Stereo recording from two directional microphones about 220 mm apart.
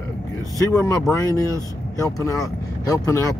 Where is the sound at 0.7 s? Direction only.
15° left (ahead or behind).